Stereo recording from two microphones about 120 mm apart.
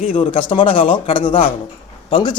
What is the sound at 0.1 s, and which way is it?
Speech, 45° left (ahead or behind).